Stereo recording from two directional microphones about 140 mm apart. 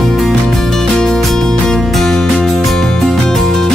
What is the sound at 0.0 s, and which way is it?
Music, centre (ahead or behind).